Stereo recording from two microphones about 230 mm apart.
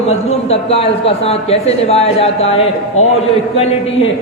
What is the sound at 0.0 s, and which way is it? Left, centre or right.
A man's voice, left.